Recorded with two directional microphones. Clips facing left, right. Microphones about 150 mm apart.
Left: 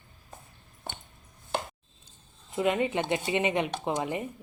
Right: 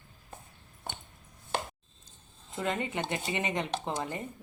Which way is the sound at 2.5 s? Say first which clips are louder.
Left 6 dB; 15° left (ahead or behind).